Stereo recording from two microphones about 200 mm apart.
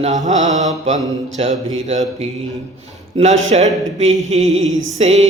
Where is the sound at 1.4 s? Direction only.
30° right (ahead or behind).